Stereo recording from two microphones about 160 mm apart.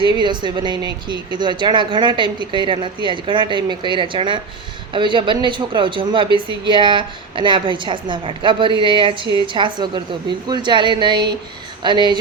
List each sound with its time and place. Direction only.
0.0 s speech: 30° right (ahead or behind)